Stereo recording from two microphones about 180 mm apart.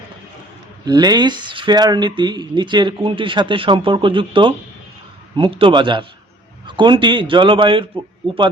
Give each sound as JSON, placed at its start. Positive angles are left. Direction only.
{"t": 0.9, "sound": "speech", "side_deg": -20}